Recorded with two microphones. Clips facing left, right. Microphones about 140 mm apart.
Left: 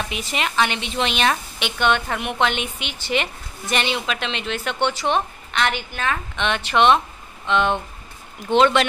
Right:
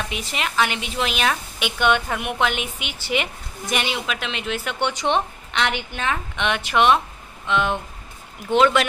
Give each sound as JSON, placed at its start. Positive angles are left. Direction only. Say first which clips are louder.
{"t": 0.1, "sound": "a woman's voice", "louder": "left 2 dB", "side_deg": 0}
{"t": 4.8, "sound": "a woman's voice", "louder": "even", "side_deg": -20}